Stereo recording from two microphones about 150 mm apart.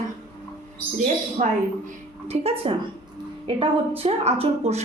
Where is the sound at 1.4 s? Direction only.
50° right (ahead or behind).